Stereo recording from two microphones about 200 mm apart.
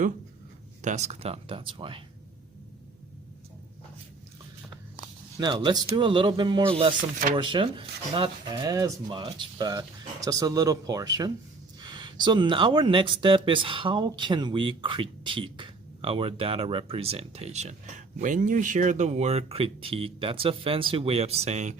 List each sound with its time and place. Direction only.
0.8 s speech: 35° right (ahead or behind)
5.4 s speech: 20° right (ahead or behind)